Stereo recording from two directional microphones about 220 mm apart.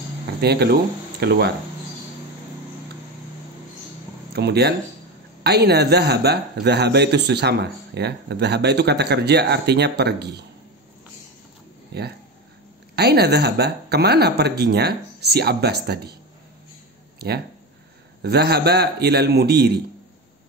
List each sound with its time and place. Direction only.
0.4 s a man's voice: 45° right (ahead or behind)
4.3 s a man's voice: 50° right (ahead or behind)
12.9 s a man's voice: 45° right (ahead or behind)
18.2 s a man's voice: 45° right (ahead or behind)